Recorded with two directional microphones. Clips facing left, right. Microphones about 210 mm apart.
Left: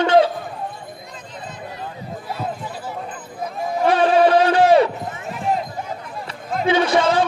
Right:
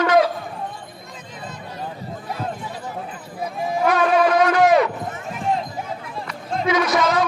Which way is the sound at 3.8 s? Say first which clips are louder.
Left 3 dB; 30° left (ahead or behind).